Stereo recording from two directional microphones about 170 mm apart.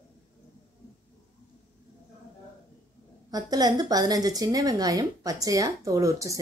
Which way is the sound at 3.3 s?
25° right (ahead or behind).